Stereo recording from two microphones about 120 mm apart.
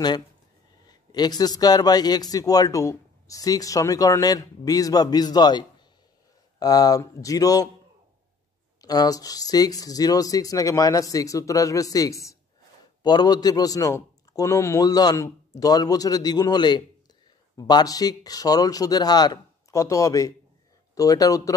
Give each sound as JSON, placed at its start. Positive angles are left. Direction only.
{"t": 0.8, "sound": "a man's voice", "side_deg": 35}
{"t": 8.8, "sound": "a man's voice", "side_deg": 30}